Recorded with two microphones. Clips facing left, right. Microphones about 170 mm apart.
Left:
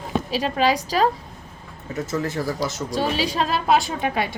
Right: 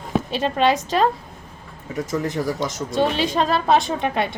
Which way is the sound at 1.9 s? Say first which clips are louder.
Right 1 dB; 15° right (ahead or behind).